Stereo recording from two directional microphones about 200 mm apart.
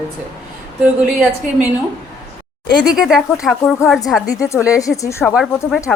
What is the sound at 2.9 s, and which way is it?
A woman's voice, 5° right (ahead or behind).